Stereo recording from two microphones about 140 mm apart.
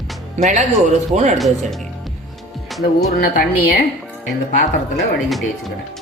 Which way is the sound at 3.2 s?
90° left.